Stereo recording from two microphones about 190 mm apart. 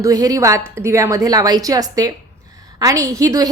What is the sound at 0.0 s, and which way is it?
A woman's voice, 20° right (ahead or behind).